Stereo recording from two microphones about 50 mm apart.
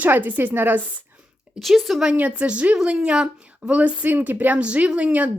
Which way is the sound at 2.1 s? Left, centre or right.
Right.